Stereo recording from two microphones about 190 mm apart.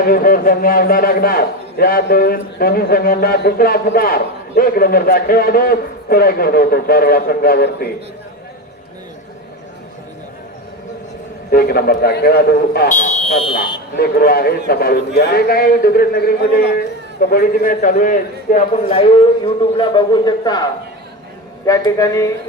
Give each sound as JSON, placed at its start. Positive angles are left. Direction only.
{"t": 0.0, "sound": "a man's voice", "side_deg": 50}
{"t": 11.5, "sound": "a man's voice", "side_deg": 50}
{"t": 13.9, "sound": "a man's voice", "side_deg": 55}
{"t": 19.7, "sound": "a man's voice", "side_deg": 25}
{"t": 21.7, "sound": "a man's voice", "side_deg": 20}